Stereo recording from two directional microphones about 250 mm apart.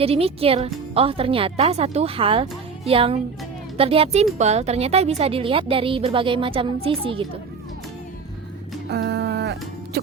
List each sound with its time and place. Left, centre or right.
0.0 s speech: right
8.9 s music: right